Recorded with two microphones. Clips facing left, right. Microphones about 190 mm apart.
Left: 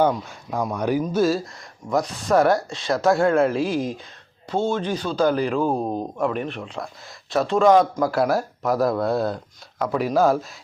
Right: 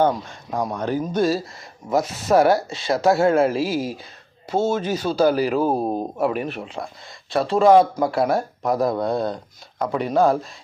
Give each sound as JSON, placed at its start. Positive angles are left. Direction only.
{"t": 0.0, "sound": "speech", "side_deg": 10}
{"t": 1.0, "sound": "speech", "side_deg": 0}